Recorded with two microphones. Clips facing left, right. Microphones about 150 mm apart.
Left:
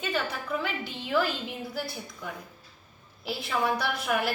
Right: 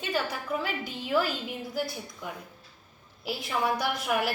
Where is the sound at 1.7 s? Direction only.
15° right (ahead or behind).